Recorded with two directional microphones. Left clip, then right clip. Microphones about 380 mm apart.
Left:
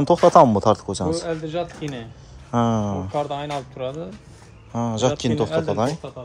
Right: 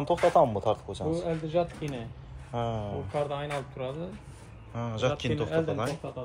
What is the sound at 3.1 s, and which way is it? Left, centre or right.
Speech, left.